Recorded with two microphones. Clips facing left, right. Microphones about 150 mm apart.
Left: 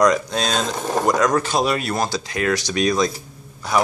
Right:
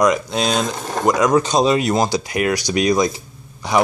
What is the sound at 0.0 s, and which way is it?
A man's voice, 10° right (ahead or behind).